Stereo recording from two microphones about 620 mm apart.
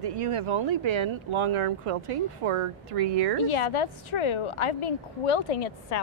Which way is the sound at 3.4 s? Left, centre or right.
Left.